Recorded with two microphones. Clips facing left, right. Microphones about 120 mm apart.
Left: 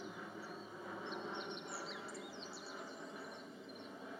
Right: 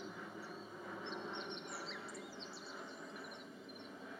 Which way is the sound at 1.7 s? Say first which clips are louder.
Left 1 dB; 5° left (ahead or behind).